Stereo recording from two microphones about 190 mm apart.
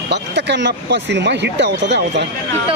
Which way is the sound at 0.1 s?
65° right (ahead or behind).